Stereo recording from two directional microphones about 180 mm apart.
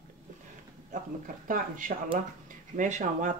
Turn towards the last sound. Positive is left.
turn(degrees=-40)  # may be behind; listen again after turning